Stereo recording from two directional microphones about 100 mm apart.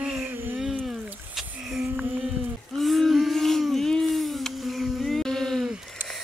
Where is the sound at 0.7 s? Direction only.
5° right (ahead or behind).